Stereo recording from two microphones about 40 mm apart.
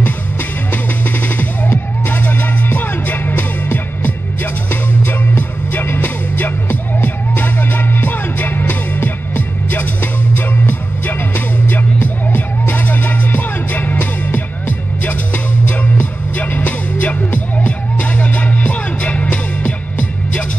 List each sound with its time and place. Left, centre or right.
1.0 s music: left
16.3 s music: left
19.2 s music: left